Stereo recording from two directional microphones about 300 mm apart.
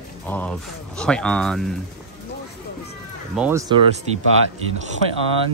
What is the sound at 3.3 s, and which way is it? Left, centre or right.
Speech, centre.